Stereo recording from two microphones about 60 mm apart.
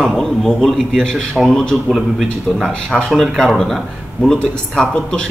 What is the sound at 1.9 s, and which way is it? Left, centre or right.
Speech, centre.